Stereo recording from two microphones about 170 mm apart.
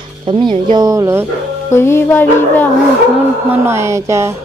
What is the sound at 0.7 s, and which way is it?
Speech, 20° right (ahead or behind).